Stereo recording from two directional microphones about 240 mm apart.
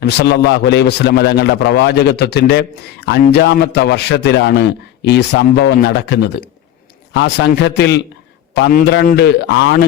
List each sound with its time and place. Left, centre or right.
0.0 s a man's voice: left